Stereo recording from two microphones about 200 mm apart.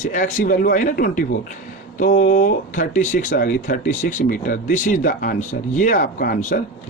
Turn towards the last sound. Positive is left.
turn(degrees=40)  # may be behind; listen again after turning